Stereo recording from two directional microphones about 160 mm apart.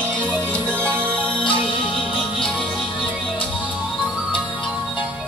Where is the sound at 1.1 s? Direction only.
10° left (ahead or behind).